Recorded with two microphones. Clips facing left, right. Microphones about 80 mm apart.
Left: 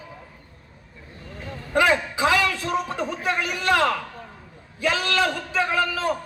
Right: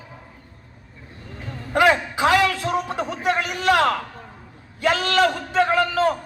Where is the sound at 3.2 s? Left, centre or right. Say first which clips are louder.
Right 4 dB; centre.